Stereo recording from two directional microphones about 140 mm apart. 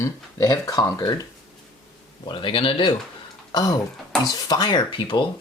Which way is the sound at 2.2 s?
35° left (ahead or behind).